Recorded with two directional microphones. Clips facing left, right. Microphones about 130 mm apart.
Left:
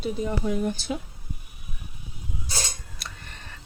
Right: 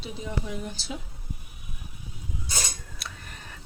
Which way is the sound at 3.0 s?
Centre (ahead or behind).